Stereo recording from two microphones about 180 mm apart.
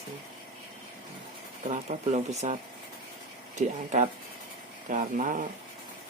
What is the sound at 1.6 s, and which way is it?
Speech, 40° right (ahead or behind).